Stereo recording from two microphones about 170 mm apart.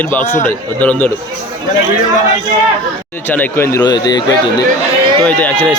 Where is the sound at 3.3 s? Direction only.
10° left (ahead or behind).